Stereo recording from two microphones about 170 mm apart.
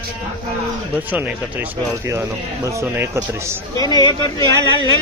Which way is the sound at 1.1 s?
10° right (ahead or behind).